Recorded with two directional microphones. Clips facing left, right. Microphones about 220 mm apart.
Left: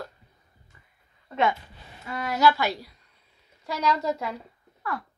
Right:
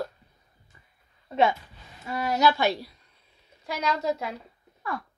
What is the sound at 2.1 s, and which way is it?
Speech, 25° right (ahead or behind).